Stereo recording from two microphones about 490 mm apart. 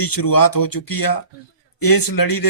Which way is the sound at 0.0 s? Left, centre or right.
Left.